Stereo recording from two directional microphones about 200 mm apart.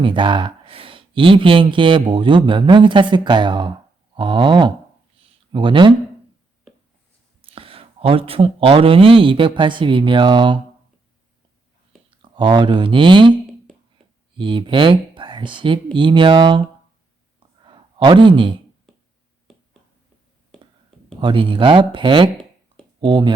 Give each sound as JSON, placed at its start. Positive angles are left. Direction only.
{"t": 0.0, "sound": "speech", "side_deg": -25}
{"t": 7.4, "sound": "speech", "side_deg": -25}
{"t": 12.2, "sound": "speech", "side_deg": -25}
{"t": 14.3, "sound": "speech", "side_deg": -25}
{"t": 17.6, "sound": "a sound", "side_deg": -25}
{"t": 19.5, "sound": "finger snapping", "side_deg": 0}
{"t": 21.2, "sound": "speech", "side_deg": -25}